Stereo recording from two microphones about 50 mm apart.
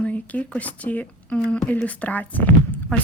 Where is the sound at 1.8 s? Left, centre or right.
Left.